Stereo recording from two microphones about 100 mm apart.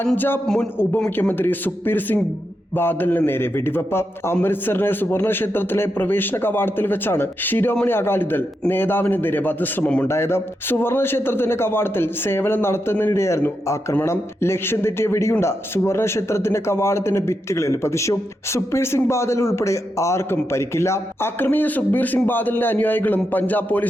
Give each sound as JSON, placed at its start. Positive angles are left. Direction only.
{"t": 0.0, "sound": "a man's voice", "side_deg": 15}
{"t": 1.1, "sound": "a man's voice", "side_deg": 20}
{"t": 10.1, "sound": "a man's voice", "side_deg": 25}